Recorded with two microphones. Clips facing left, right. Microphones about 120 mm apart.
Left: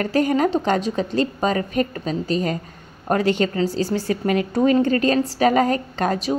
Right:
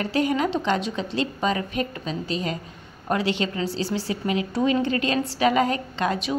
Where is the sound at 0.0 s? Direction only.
45° left (ahead or behind).